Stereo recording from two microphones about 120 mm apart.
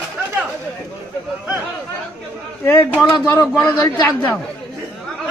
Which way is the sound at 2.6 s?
20° left (ahead or behind).